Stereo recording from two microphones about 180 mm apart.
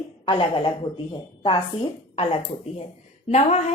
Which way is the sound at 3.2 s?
35° left (ahead or behind).